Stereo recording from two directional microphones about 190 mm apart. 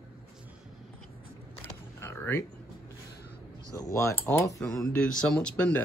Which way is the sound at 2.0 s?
10° left (ahead or behind).